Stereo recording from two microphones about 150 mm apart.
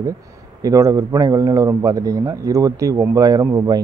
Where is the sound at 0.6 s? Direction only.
20° right (ahead or behind).